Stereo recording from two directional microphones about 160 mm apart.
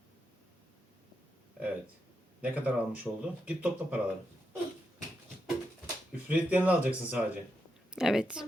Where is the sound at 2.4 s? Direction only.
10° right (ahead or behind).